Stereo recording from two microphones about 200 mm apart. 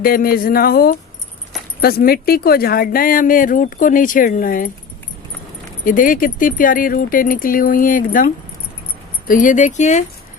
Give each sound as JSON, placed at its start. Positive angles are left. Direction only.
{"t": 0.0, "sound": "speech", "side_deg": 50}
{"t": 5.8, "sound": "speech", "side_deg": 40}